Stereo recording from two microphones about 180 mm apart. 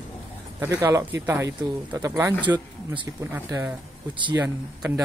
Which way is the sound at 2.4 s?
25° right (ahead or behind).